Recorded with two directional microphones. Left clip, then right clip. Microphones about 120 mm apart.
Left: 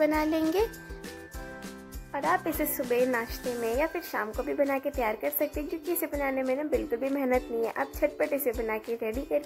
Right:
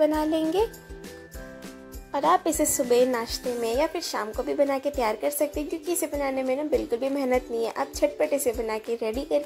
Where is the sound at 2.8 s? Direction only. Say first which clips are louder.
Right 4 dB; 25° right (ahead or behind).